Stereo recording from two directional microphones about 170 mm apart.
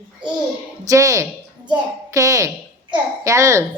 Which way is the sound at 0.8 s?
20° right (ahead or behind).